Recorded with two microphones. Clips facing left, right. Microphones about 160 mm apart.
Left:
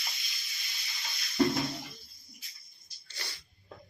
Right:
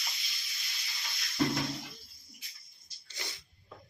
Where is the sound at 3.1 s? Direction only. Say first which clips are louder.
Right 1 dB; 20° right (ahead or behind).